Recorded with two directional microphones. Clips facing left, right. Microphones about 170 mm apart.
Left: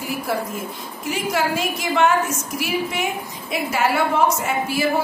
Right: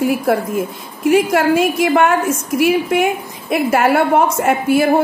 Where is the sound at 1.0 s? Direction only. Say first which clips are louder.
Right 10 dB; 60° right (ahead or behind).